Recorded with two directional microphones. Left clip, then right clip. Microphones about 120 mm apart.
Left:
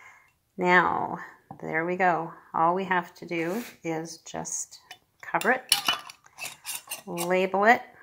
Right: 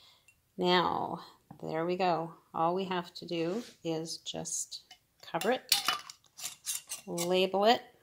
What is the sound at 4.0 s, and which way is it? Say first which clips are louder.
Speech: left 3 dB; 35° right (ahead or behind).